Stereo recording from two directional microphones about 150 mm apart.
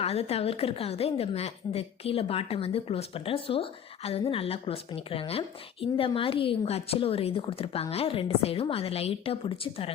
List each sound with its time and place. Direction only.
0.0 s a woman's voice: 45° left (ahead or behind)